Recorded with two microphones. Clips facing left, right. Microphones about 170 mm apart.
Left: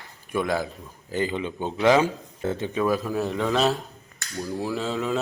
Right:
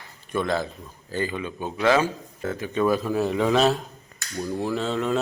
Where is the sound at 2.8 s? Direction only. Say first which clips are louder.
Right 4 dB; centre (ahead or behind).